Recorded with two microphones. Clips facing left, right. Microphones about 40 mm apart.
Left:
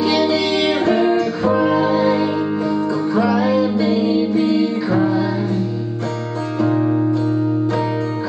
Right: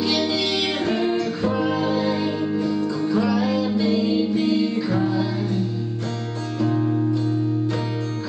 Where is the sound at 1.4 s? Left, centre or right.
Centre.